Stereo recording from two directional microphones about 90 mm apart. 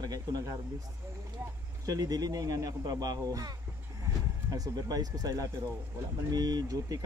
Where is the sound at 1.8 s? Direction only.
45° right (ahead or behind).